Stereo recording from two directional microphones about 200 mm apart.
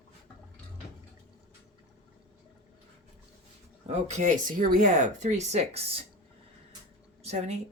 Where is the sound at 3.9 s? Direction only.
35° right (ahead or behind).